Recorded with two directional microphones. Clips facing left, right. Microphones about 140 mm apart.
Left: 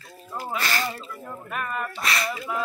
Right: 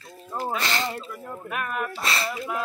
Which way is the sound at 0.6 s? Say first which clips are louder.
Even; 20° right (ahead or behind).